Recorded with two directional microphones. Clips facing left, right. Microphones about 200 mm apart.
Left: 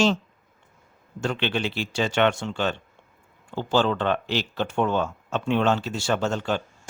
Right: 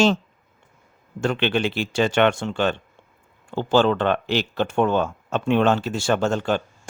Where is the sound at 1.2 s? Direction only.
60° right (ahead or behind).